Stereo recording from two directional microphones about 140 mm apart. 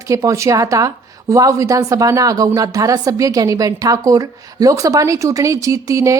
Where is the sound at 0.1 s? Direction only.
25° right (ahead or behind).